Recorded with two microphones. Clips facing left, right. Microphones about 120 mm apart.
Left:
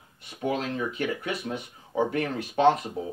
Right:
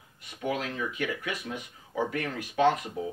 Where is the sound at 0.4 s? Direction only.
30° left (ahead or behind).